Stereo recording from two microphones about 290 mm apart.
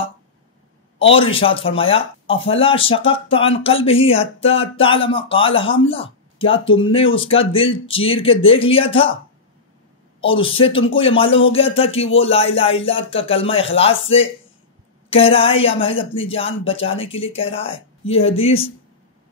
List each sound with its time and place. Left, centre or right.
1.1 s speech: centre
10.2 s a woman's voice: centre